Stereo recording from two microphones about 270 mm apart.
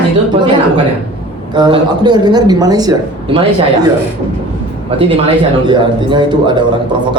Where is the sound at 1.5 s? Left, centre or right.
Centre.